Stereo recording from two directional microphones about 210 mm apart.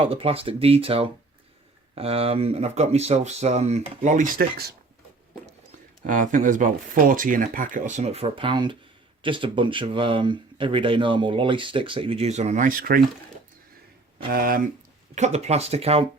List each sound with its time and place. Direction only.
0.0 s speech: 25° right (ahead or behind); by 4.6 s 45° right (ahead or behind)
6.1 s speech: 40° right (ahead or behind)
14.3 s speech: 45° right (ahead or behind)
15.1 s speech: 30° right (ahead or behind)